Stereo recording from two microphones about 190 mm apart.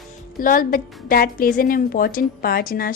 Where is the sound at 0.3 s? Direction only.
45° left (ahead or behind).